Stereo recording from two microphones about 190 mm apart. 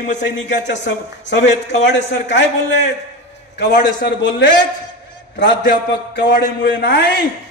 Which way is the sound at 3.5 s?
60° left (ahead or behind).